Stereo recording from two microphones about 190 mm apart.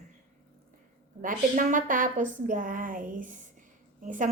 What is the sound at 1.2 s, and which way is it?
A woman's voice, 45° right (ahead or behind).